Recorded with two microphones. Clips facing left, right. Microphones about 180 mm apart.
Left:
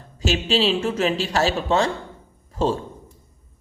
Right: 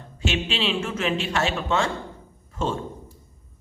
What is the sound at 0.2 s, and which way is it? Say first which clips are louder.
A woman's voice: left 5 dB; 40° left (ahead or behind).